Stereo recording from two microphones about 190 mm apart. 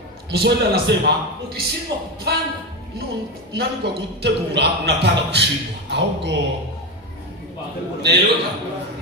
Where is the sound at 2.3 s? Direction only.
60° right (ahead or behind).